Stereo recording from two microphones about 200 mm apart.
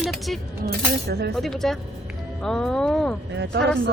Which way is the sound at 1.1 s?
55° right (ahead or behind).